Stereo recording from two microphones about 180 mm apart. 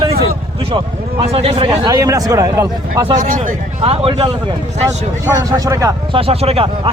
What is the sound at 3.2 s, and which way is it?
Speech, 45° right (ahead or behind).